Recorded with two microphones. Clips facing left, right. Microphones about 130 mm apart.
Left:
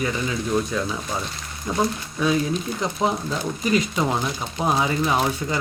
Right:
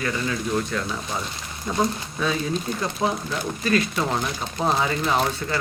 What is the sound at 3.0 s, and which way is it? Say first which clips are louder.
Speech: left 2 dB; 20° left (ahead or behind).